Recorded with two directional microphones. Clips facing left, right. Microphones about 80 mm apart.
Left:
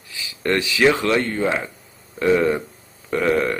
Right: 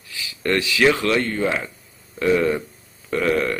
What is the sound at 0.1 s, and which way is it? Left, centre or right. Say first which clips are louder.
A man's voice: even; left.